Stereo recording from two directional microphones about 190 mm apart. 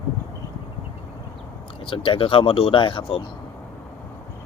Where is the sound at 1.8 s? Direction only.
25° left (ahead or behind).